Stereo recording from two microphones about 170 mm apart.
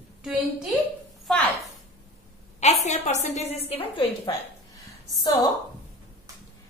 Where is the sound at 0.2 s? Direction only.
5° right (ahead or behind).